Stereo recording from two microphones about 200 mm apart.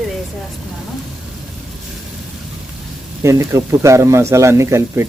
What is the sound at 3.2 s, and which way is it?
Speech, 15° right (ahead or behind).